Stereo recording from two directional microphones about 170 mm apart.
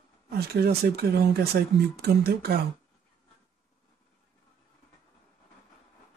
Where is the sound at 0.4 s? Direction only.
70° right (ahead or behind).